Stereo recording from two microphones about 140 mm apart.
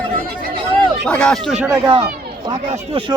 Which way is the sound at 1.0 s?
5° left (ahead or behind).